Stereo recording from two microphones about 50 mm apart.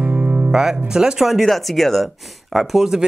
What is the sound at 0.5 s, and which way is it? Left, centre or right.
Speech, centre.